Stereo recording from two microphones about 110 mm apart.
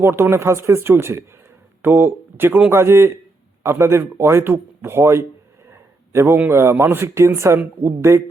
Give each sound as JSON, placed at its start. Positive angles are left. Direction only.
{"t": 0.0, "sound": "speech", "side_deg": -20}